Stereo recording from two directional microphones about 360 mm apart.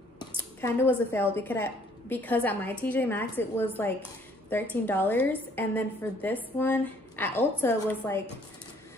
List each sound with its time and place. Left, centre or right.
0.6 s a woman's voice: centre